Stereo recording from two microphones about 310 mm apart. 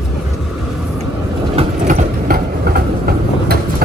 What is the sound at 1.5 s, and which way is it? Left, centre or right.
Vehicle, right.